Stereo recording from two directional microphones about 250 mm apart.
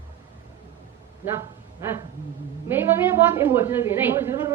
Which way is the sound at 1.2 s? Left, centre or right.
Centre.